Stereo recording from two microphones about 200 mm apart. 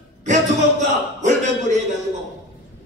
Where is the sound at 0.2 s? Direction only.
35° right (ahead or behind).